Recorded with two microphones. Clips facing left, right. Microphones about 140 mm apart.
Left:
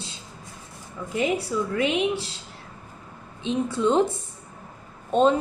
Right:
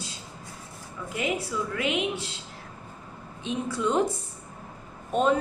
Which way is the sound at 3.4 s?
25° left (ahead or behind).